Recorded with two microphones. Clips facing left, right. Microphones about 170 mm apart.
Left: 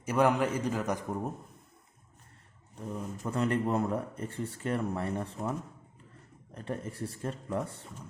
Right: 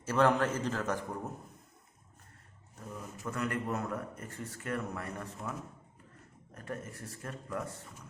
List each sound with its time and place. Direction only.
0.0 s a man's voice: 15° left (ahead or behind)
2.7 s speech: 30° left (ahead or behind)